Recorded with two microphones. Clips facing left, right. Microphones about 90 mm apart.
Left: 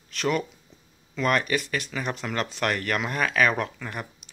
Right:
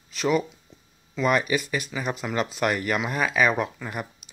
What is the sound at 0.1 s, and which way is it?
A man's voice, 5° right (ahead or behind).